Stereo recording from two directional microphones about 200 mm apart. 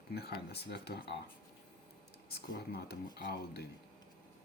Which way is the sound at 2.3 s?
50° left (ahead or behind).